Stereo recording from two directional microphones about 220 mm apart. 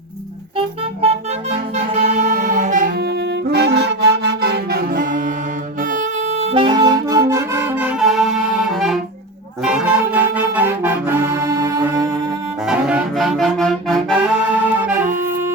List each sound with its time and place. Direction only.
1.0 s music: 25° right (ahead or behind)
5.9 s accordion: 35° right (ahead or behind); by 8.3 s centre (ahead or behind)
8.7 s saxophone: centre (ahead or behind)
9.6 s music: 5° right (ahead or behind)
12.6 s music: 5° right (ahead or behind)